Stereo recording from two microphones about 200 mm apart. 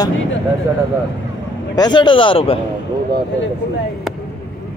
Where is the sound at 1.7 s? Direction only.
20° left (ahead or behind).